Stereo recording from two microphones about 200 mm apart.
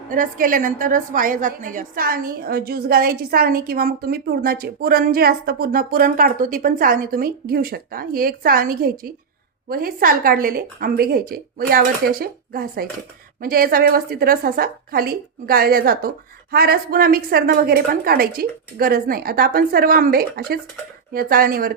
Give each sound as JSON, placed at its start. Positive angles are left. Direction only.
{"t": 0.1, "sound": "a woman's voice", "side_deg": -40}